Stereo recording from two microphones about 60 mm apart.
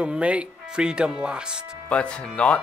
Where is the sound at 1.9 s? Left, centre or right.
Centre.